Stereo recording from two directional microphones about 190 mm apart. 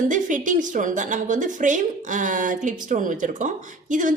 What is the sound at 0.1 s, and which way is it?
A woman's voice, 40° right (ahead or behind).